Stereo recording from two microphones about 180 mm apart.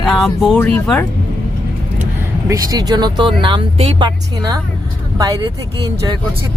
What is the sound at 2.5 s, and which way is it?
Speech, 20° right (ahead or behind).